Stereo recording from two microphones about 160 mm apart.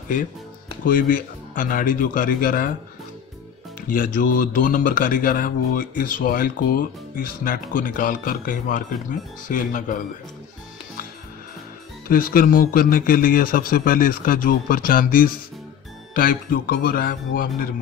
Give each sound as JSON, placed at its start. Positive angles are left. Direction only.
{"t": 0.8, "sound": "speech", "side_deg": 60}
{"t": 3.9, "sound": "speech", "side_deg": 60}
{"t": 12.1, "sound": "speech", "side_deg": 60}